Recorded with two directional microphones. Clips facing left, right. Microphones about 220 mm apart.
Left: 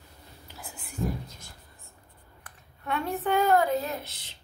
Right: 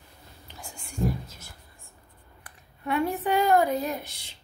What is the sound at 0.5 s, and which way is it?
Whispering, 5° left (ahead or behind).